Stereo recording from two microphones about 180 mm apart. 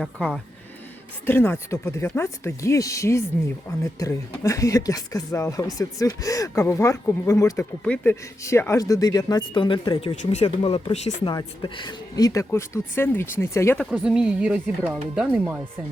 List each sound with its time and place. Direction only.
0.0 s speech: 5° left (ahead or behind)
13.9 s speech: 5° right (ahead or behind)